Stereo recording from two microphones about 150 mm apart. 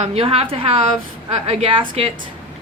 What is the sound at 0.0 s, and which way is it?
A woman's voice, 40° right (ahead or behind).